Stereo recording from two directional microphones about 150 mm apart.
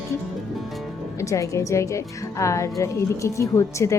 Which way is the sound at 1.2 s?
20° left (ahead or behind).